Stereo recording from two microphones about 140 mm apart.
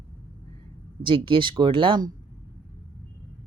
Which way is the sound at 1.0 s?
35° right (ahead or behind).